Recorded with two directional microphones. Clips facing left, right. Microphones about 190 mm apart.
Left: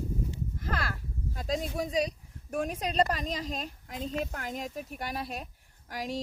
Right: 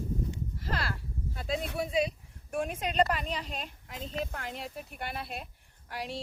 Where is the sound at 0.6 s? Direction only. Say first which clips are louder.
Even; 50° left (ahead or behind).